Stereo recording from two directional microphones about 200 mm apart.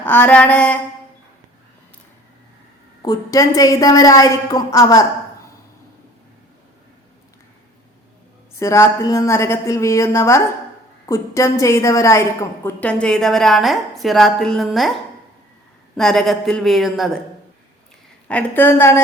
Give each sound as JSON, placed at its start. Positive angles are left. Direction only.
{"t": 0.0, "sound": "a woman's voice", "side_deg": 10}
{"t": 3.0, "sound": "a woman's voice", "side_deg": 15}
{"t": 8.5, "sound": "a woman's voice", "side_deg": 15}
{"t": 16.0, "sound": "a woman's voice", "side_deg": 0}
{"t": 18.3, "sound": "a woman's voice", "side_deg": 10}